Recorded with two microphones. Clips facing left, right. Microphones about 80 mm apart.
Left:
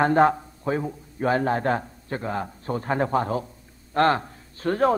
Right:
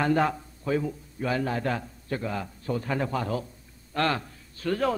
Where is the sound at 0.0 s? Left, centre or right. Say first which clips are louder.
Left 6 dB; left.